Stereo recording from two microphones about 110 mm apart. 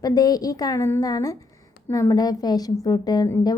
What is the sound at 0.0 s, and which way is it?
A woman's voice, 35° left (ahead or behind).